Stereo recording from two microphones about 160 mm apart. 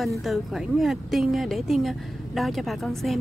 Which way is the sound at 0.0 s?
Centre (ahead or behind).